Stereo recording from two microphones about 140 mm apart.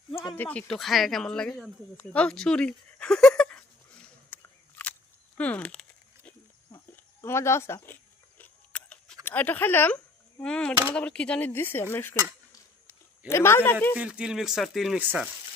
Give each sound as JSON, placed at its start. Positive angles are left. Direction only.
{"t": 0.3, "sound": "speech", "side_deg": 10}
{"t": 4.3, "sound": "a sound", "side_deg": 15}
{"t": 5.4, "sound": "speech", "side_deg": 10}
{"t": 6.9, "sound": "speech", "side_deg": 20}
{"t": 8.4, "sound": "a sound", "side_deg": 10}
{"t": 9.2, "sound": "speech", "side_deg": 15}
{"t": 13.2, "sound": "a man's voice", "side_deg": 20}
{"t": 13.9, "sound": "speech", "side_deg": -10}
{"t": 15.0, "sound": "speech", "side_deg": -10}